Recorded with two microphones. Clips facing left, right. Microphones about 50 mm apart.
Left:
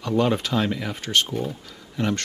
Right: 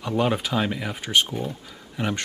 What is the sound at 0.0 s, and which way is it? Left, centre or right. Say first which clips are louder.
Speech: left 2 dB; centre.